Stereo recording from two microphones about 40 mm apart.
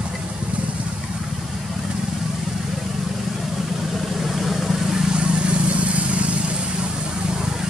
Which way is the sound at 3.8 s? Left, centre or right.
Centre.